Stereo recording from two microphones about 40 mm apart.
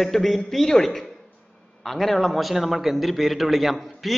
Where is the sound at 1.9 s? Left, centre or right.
Centre.